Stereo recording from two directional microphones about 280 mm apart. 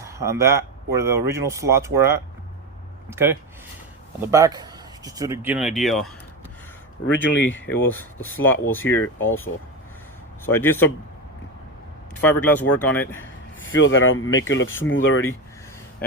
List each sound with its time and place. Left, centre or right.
0.0 s speech: centre
7.1 s speech: left
7.7 s speech: centre
12.2 s speech: centre
13.7 s speech: left